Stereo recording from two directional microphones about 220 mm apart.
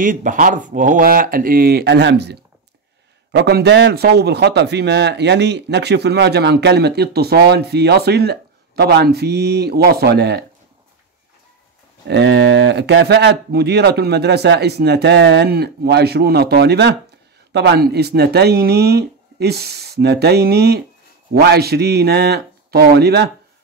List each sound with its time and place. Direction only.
0.0 s a man's voice: 35° right (ahead or behind)
12.1 s a man's voice: 50° right (ahead or behind)